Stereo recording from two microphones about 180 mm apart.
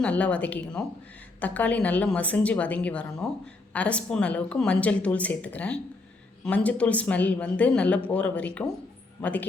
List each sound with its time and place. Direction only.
0.0 s speech: 5° left (ahead or behind)